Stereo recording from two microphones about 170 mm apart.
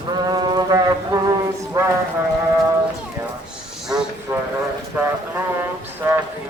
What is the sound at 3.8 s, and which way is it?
Vehicle, 5° right (ahead or behind).